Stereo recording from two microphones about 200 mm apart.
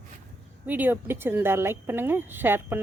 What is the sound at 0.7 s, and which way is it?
A woman's voice, 10° right (ahead or behind).